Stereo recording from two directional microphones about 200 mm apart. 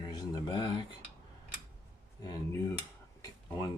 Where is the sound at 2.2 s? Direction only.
15° left (ahead or behind).